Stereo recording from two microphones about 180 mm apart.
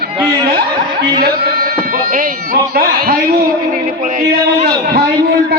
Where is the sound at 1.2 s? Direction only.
55° right (ahead or behind).